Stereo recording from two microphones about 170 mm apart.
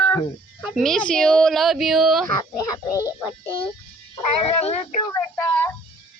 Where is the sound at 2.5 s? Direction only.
20° left (ahead or behind).